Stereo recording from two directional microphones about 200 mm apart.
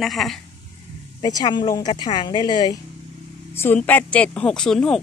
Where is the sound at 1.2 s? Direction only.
20° left (ahead or behind).